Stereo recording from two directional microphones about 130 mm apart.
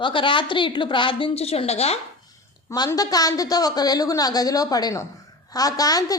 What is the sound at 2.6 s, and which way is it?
A woman's voice, 30° left (ahead or behind).